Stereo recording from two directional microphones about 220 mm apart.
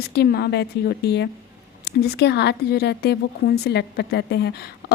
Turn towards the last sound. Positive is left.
turn(degrees=50)  # may be behind; listen again after turning